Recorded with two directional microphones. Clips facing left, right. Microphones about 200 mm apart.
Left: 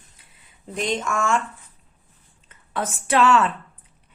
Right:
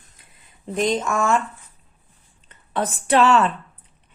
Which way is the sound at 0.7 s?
40° right (ahead or behind).